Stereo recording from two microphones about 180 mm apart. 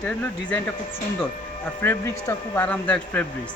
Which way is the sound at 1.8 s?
15° left (ahead or behind).